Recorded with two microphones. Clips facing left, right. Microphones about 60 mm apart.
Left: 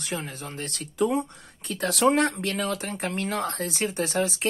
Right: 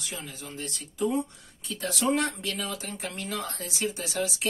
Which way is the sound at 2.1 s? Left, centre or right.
Left.